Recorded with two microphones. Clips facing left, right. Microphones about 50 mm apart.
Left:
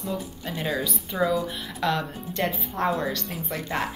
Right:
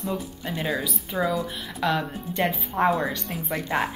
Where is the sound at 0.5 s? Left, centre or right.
Centre.